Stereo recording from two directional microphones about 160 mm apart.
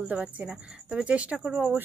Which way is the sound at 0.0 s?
10° right (ahead or behind).